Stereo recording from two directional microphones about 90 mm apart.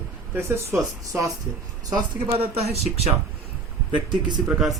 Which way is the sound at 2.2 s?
85° right.